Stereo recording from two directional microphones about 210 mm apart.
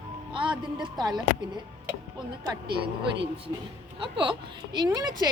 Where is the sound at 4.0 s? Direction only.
25° right (ahead or behind).